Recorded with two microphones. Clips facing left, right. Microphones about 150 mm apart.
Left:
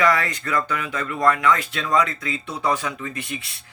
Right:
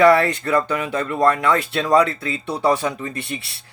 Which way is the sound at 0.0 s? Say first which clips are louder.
Right 7 dB; 30° right (ahead or behind).